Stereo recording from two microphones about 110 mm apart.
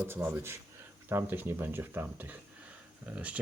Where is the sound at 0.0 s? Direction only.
20° right (ahead or behind).